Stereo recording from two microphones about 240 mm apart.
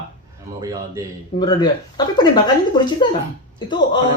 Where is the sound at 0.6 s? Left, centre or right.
Centre.